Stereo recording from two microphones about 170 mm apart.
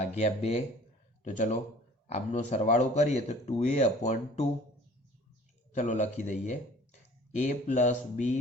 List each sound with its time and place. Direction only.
0.0 s speech: 40° left (ahead or behind)
5.7 s speech: 45° left (ahead or behind)